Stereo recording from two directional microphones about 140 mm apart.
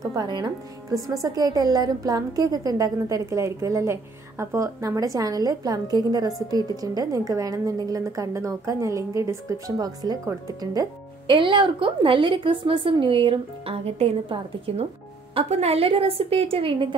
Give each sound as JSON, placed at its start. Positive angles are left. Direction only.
{"t": 0.0, "sound": "a woman's voice", "side_deg": -25}